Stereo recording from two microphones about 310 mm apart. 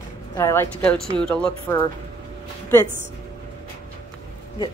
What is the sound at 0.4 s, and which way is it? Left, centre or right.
A woman's voice, centre.